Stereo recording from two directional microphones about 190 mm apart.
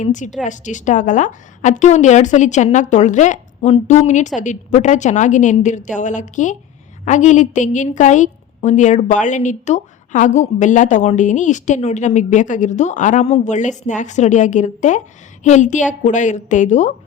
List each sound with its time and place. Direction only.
0.0 s a woman's voice: 40° left (ahead or behind)